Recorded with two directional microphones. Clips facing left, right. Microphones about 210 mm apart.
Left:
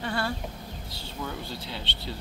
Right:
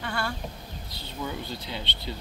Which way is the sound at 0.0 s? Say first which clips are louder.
Left 2 dB; 35° left (ahead or behind).